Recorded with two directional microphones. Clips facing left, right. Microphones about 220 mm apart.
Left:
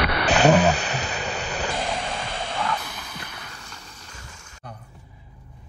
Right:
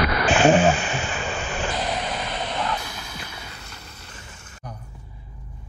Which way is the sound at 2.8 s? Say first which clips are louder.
Right 1 dB; 10° right (ahead or behind).